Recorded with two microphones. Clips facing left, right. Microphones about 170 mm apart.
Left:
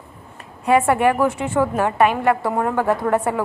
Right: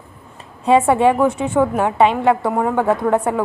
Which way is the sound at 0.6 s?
20° right (ahead or behind).